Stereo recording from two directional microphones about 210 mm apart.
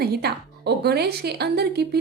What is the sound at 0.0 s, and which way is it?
A woman's voice, 50° right (ahead or behind).